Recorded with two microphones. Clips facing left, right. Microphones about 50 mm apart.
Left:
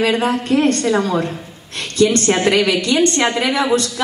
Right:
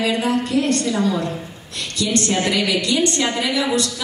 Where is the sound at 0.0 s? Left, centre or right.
Left.